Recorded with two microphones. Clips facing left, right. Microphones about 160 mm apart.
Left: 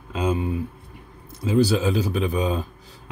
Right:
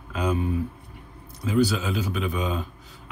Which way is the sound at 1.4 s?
30° left (ahead or behind).